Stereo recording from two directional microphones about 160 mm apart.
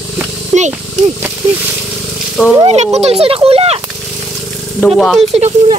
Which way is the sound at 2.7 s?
45° right (ahead or behind).